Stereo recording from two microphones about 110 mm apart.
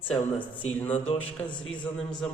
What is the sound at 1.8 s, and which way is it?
Speech, 5° left (ahead or behind).